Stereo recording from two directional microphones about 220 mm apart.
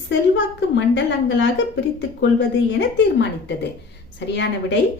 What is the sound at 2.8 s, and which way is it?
A woman's voice, 50° left (ahead or behind).